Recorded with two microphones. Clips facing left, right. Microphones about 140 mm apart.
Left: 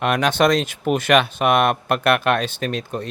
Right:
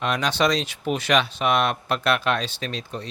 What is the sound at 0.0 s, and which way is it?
Speech, 60° left (ahead or behind).